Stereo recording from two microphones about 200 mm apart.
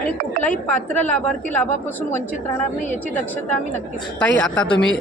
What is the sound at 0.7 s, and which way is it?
A woman's voice, 5° left (ahead or behind).